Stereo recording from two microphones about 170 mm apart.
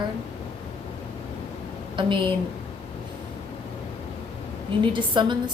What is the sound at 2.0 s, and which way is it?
Speech, 30° right (ahead or behind).